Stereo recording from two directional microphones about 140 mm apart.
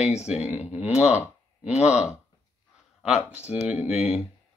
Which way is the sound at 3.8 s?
5° right (ahead or behind).